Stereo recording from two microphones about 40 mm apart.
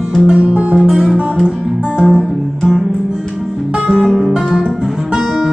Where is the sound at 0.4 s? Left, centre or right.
Right.